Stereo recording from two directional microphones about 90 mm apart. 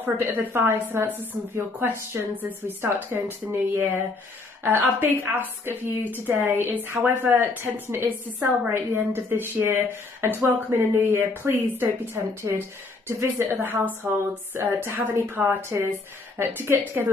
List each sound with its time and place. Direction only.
0.0 s a woman's voice: 25° right (ahead or behind)